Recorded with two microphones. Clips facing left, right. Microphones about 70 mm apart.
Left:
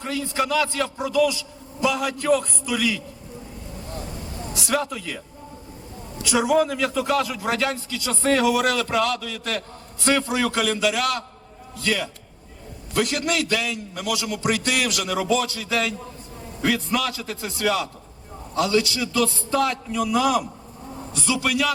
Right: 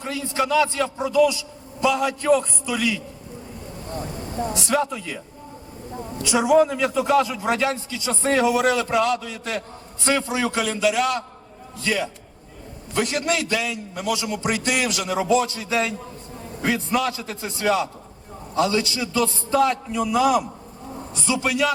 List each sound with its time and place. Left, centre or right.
0.0 s a man's voice: centre
4.5 s a man's voice: centre
6.2 s a man's voice: centre
7.9 s a man's voice: centre
10.0 s a man's voice: centre
14.4 s a man's voice: centre; by 15.7 s right
15.7 s a man's voice: centre